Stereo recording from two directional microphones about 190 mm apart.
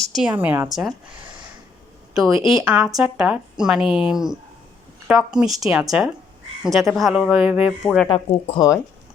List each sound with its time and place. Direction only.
0.0 s speech: centre (ahead or behind)
2.1 s a woman's voice: centre (ahead or behind)
8.0 s speech: 30° left (ahead or behind)